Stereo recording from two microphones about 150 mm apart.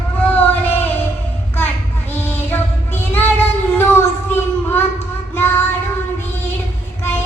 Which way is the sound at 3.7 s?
15° left (ahead or behind).